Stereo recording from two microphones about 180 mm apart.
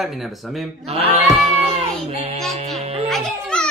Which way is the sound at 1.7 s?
35° right (ahead or behind).